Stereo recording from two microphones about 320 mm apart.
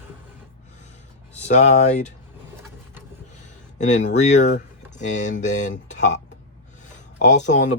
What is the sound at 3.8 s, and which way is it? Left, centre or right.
Speech, left.